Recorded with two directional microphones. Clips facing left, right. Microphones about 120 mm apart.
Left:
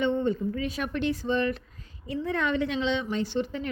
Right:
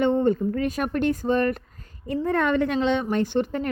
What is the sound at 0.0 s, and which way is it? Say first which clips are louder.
Speech: right 5 dB; 45° right (ahead or behind).